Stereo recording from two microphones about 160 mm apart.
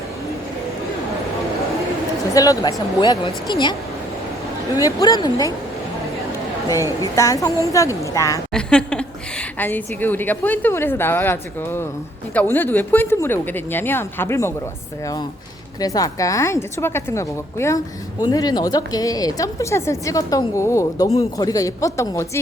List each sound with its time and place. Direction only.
2.3 s a woman's voice: 20° left (ahead or behind)
4.8 s a woman's voice: 20° left (ahead or behind)
7.0 s a woman's voice: 20° left (ahead or behind)
8.5 s a woman's voice: 5° left (ahead or behind)